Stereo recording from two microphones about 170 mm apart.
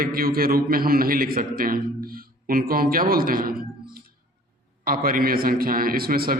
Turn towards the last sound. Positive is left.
turn(degrees=-60)  # may be behind; listen again after turning